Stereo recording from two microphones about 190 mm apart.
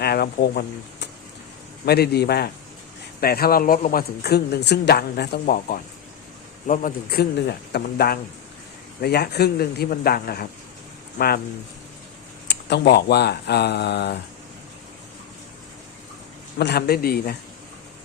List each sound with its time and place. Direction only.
0.0 s speech: 55° left (ahead or behind)
12.5 s speech: 65° left (ahead or behind)
16.6 s speech: 60° left (ahead or behind)